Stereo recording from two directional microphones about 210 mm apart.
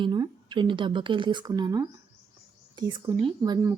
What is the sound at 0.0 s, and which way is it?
A woman's voice, 20° right (ahead or behind).